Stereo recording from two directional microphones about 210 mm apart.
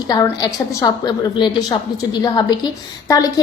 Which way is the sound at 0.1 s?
20° left (ahead or behind).